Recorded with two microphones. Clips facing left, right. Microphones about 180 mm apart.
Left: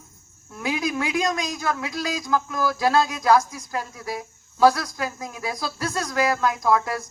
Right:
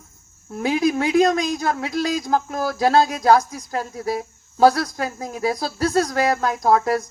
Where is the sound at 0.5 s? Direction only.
35° right (ahead or behind).